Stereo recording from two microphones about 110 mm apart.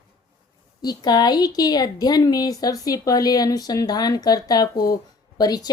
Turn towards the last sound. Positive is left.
turn(degrees=35)  # may be behind; listen again after turning